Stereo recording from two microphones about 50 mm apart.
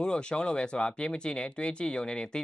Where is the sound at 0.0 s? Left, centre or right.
Centre.